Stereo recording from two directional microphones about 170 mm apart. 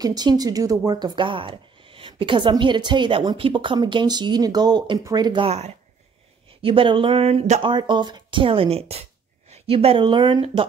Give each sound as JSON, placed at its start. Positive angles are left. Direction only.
{"t": 0.0, "sound": "a woman's voice", "side_deg": -25}
{"t": 7.6, "sound": "a woman's voice", "side_deg": -25}